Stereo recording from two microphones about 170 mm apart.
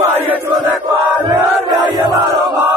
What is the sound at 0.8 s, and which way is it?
Chant, 30° right (ahead or behind).